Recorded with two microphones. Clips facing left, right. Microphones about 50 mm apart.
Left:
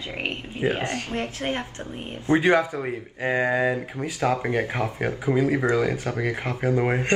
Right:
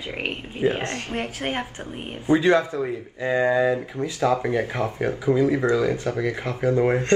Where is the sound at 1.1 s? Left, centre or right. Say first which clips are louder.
Even; right.